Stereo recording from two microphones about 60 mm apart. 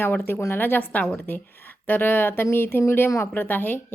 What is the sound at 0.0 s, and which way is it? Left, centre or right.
A woman's voice, left.